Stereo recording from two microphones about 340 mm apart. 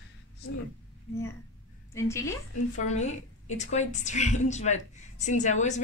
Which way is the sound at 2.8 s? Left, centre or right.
Centre.